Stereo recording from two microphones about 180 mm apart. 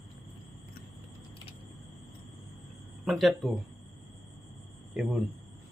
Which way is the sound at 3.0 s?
Centre (ahead or behind).